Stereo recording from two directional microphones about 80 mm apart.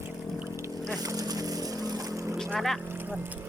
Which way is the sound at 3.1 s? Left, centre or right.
Right.